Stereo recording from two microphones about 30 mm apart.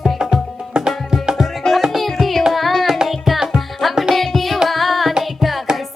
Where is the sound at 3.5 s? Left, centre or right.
Centre.